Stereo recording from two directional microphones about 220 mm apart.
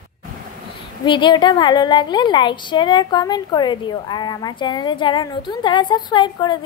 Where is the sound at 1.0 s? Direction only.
20° left (ahead or behind).